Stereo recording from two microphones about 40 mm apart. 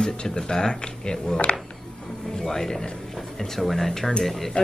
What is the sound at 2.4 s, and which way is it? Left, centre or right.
Speech, centre.